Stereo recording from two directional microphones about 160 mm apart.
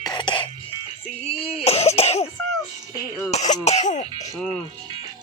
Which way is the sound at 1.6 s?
40° left (ahead or behind).